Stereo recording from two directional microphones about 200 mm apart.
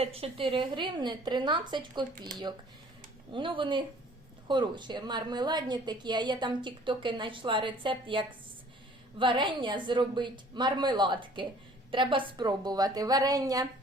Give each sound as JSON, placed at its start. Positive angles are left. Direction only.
{"t": 0.0, "sound": "a woman's voice", "side_deg": -30}
{"t": 3.3, "sound": "a woman's voice", "side_deg": -25}